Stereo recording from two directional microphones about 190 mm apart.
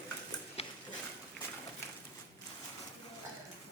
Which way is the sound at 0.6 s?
35° left (ahead or behind).